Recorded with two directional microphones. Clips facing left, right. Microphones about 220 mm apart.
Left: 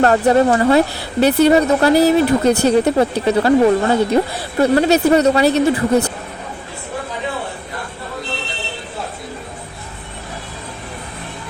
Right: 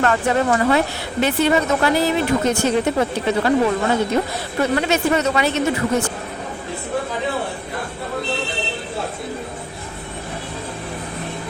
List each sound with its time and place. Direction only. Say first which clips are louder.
0.0 s speech: left 6 dB; 35° left (ahead or behind)